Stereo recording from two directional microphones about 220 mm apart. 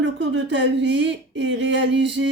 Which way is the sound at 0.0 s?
55° right (ahead or behind).